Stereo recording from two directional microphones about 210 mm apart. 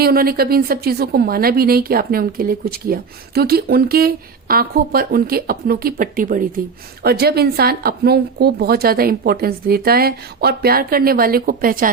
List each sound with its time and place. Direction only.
0.0 s a woman's voice: 45° right (ahead or behind)